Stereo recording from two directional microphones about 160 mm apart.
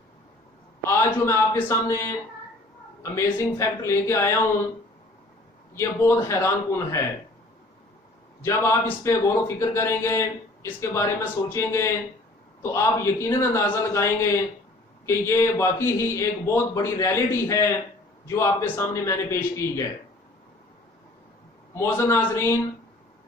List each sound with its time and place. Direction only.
0.8 s a man's voice: 15° left (ahead or behind)
5.8 s a man's voice: 15° left (ahead or behind)
8.5 s a man's voice: 15° left (ahead or behind)
21.7 s a man's voice: 15° left (ahead or behind)